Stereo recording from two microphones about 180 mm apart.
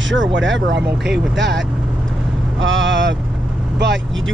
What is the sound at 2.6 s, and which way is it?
Speech, 90° right.